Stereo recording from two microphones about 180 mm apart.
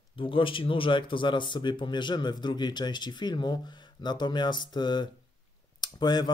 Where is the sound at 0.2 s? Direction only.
30° left (ahead or behind).